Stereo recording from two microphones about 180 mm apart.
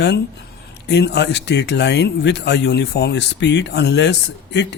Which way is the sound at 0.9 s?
70° left (ahead or behind).